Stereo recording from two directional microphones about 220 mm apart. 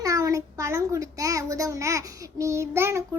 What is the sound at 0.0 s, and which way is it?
A child's voice, 15° right (ahead or behind).